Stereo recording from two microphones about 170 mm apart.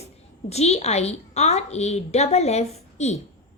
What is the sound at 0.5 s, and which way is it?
A woman's voice, 40° left (ahead or behind).